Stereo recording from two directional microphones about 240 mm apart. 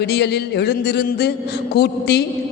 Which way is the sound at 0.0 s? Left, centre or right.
Left.